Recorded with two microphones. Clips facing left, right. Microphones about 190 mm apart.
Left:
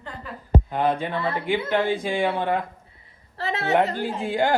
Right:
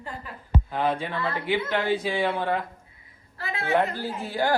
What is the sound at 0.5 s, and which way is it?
Speech, 50° left (ahead or behind).